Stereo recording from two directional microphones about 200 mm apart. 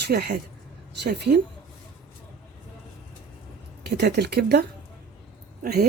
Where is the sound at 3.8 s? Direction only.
55° right (ahead or behind).